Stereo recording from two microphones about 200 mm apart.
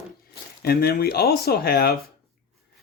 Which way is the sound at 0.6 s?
50° left (ahead or behind).